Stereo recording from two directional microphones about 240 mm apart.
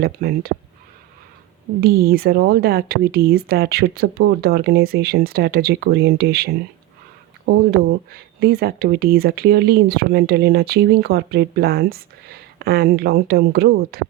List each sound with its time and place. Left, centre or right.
0.0 s speech: right
1.8 s speech: right